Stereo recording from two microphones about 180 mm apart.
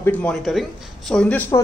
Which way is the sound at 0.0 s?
5° left (ahead or behind).